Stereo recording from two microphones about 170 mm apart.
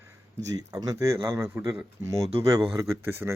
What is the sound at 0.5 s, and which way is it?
Speech, 20° right (ahead or behind).